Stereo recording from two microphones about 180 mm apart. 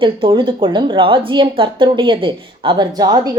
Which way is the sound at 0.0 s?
30° right (ahead or behind).